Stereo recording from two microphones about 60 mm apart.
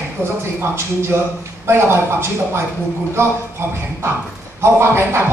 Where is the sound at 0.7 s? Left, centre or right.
Right.